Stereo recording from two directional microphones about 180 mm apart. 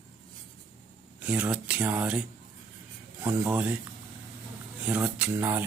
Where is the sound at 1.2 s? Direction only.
10° right (ahead or behind).